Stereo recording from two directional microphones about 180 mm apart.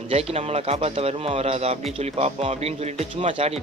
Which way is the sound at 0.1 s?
35° right (ahead or behind).